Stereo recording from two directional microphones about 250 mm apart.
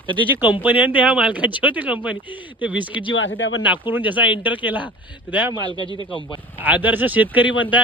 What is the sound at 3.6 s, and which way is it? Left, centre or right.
Speech, centre.